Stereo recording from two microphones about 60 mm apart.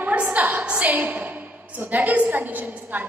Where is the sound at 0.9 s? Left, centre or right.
Right.